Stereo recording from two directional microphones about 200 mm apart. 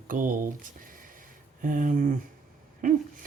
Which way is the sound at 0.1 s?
40° right (ahead or behind).